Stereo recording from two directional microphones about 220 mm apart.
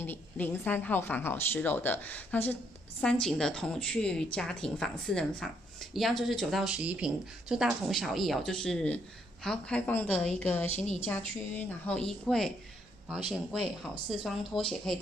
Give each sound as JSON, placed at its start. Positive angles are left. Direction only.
{"t": 0.0, "sound": "a woman's voice", "side_deg": 10}
{"t": 10.8, "sound": "a woman's voice", "side_deg": 30}
{"t": 11.1, "sound": "a woman's voice", "side_deg": 5}